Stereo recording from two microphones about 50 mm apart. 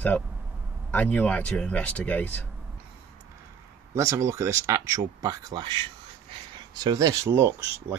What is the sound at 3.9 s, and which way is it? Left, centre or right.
Speech, right.